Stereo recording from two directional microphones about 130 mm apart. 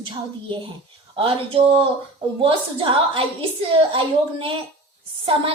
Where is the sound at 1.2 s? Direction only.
45° right (ahead or behind).